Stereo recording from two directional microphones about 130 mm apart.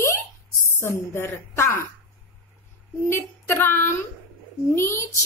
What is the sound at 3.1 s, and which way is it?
A woman's voice, 20° left (ahead or behind).